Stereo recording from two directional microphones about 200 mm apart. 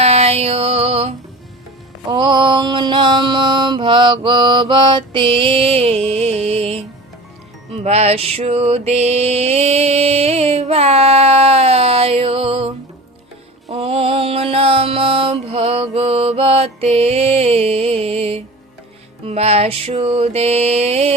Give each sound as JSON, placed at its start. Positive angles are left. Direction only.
{"t": 0.0, "sound": "music", "side_deg": -30}
{"t": 2.0, "sound": "mantra", "side_deg": -25}